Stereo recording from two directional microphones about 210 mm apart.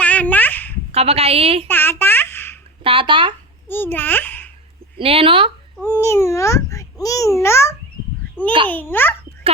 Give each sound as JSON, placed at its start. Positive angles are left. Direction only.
{"t": 0.0, "sound": "babbling", "side_deg": 5}
{"t": 0.9, "sound": "a woman's voice", "side_deg": -30}
{"t": 1.6, "sound": "a sound", "side_deg": 10}
{"t": 2.8, "sound": "a woman's voice", "side_deg": -25}
{"t": 3.7, "sound": "a child's voice", "side_deg": 10}
{"t": 4.9, "sound": "a woman's voice", "side_deg": -25}
{"t": 5.8, "sound": "a child's voice", "side_deg": 10}